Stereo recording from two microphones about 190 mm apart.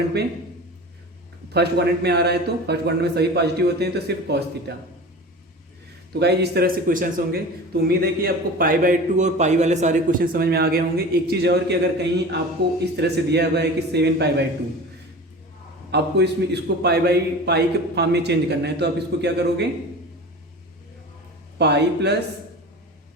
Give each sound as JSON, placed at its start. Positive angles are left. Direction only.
{"t": 1.5, "sound": "a man's voice", "side_deg": -60}
{"t": 6.1, "sound": "a man's voice", "side_deg": -60}
{"t": 15.9, "sound": "a man's voice", "side_deg": -60}
{"t": 21.6, "sound": "a man's voice", "side_deg": -60}